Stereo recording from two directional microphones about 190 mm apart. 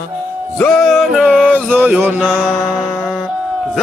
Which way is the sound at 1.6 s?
10° right (ahead or behind).